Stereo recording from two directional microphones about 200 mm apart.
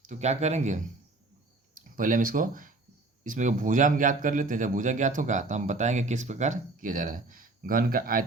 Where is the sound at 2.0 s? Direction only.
40° right (ahead or behind).